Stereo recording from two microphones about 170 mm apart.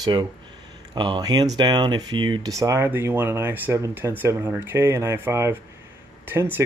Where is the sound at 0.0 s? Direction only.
25° right (ahead or behind).